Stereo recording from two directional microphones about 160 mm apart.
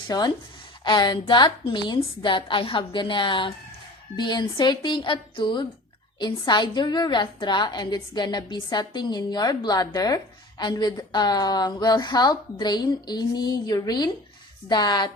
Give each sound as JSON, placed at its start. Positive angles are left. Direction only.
{"t": 0.1, "sound": "a woman's voice", "side_deg": 25}